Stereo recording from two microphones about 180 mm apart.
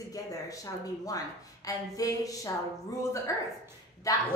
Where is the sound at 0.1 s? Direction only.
20° left (ahead or behind).